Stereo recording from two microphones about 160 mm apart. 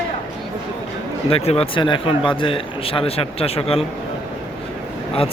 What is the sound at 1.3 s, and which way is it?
A man's voice, 40° left (ahead or behind).